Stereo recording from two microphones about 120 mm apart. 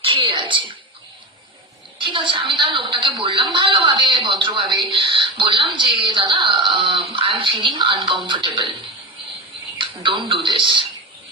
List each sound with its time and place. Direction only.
0.0 s a child's voice: 45° right (ahead or behind)
2.0 s a woman's voice: 45° right (ahead or behind)